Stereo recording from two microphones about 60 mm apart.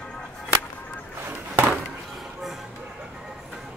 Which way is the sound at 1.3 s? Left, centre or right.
Right.